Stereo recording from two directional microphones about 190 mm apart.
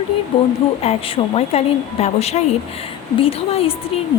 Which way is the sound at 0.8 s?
30° left (ahead or behind).